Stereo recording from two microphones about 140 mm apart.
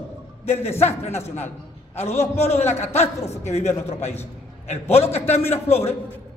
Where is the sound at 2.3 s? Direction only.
50° left (ahead or behind).